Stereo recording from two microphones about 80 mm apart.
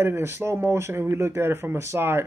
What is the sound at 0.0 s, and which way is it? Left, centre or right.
Speech, right.